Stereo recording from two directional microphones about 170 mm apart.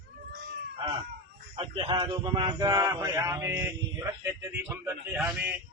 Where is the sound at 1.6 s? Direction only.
30° right (ahead or behind).